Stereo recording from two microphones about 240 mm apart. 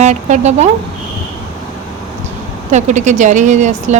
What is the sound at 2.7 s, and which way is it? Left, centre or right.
A woman's voice, right.